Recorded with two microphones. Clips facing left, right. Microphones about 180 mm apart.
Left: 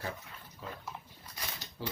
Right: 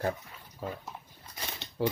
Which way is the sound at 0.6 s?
45° right (ahead or behind).